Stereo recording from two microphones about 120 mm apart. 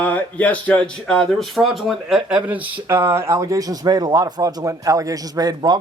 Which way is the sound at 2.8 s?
25° right (ahead or behind).